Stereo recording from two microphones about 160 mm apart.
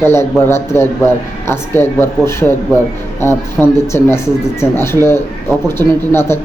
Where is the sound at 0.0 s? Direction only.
15° left (ahead or behind).